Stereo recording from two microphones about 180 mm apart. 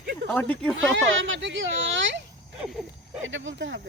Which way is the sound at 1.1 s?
90° right.